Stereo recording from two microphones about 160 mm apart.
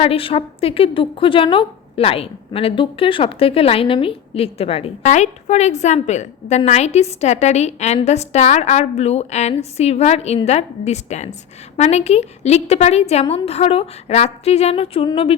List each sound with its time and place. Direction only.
0.0 s a woman's voice: 35° left (ahead or behind)